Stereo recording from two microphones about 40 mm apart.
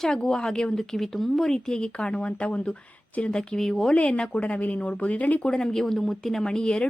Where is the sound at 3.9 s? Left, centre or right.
Left.